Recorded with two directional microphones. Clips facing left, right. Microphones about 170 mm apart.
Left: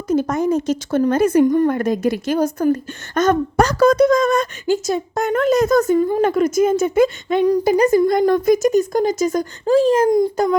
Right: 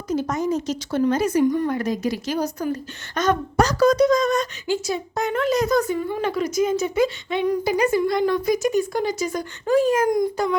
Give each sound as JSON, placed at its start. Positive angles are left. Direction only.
{"t": 0.1, "sound": "a woman's voice", "side_deg": 50}
{"t": 9.7, "sound": "speech", "side_deg": 30}